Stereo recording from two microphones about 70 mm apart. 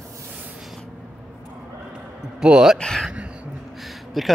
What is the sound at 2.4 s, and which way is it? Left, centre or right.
Speech, centre.